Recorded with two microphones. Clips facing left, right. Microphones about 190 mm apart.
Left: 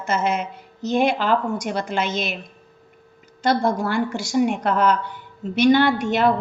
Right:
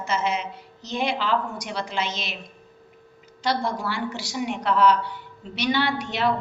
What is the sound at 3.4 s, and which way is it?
A woman's voice, 50° left (ahead or behind).